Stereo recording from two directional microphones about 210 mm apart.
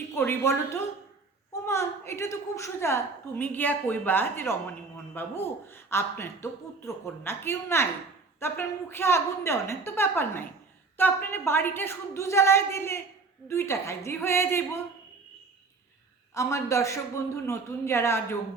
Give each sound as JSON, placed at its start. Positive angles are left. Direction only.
{"t": 0.2, "sound": "a woman's voice", "side_deg": 10}
{"t": 16.3, "sound": "a woman's voice", "side_deg": 15}